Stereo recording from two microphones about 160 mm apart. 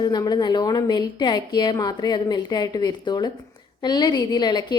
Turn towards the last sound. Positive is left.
turn(degrees=25)  # may be behind; listen again after turning